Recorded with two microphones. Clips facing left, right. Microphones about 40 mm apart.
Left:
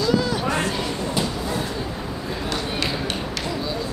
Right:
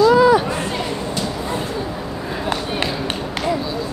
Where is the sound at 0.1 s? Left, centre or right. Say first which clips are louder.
Right 10 dB; centre.